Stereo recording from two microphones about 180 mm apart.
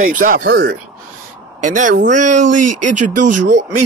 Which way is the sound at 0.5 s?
70° right (ahead or behind).